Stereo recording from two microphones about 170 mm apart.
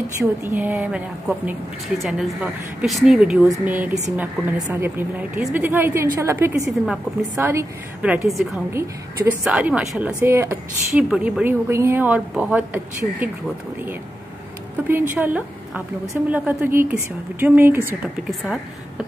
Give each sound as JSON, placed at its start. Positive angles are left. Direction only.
{"t": 0.2, "sound": "a woman's voice", "side_deg": -15}
{"t": 10.9, "sound": "a woman's voice", "side_deg": -5}
{"t": 14.9, "sound": "a woman's voice", "side_deg": -10}